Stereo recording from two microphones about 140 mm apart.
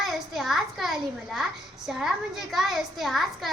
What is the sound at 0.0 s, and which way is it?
A child's voice, centre (ahead or behind).